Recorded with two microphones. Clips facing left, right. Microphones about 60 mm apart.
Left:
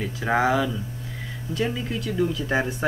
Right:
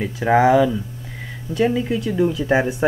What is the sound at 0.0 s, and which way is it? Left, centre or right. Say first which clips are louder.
Speech: right 7 dB; centre.